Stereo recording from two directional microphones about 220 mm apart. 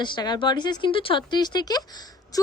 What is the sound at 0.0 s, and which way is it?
Speech, 20° left (ahead or behind).